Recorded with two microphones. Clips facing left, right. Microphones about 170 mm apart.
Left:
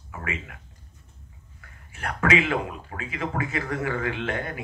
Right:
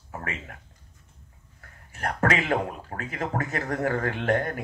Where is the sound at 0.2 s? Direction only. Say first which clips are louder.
Left 5 dB; 40° right (ahead or behind).